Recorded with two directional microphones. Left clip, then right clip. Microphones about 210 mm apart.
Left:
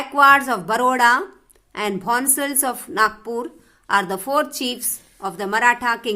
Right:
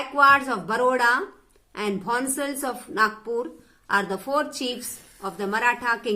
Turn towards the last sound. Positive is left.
turn(degrees=40)  # may be behind; listen again after turning